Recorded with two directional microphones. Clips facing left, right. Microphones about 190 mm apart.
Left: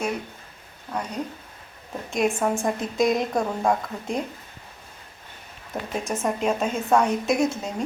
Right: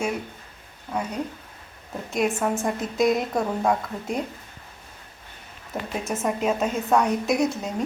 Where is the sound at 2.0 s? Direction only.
Centre (ahead or behind).